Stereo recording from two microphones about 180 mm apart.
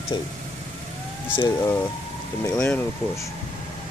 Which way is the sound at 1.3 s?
25° left (ahead or behind).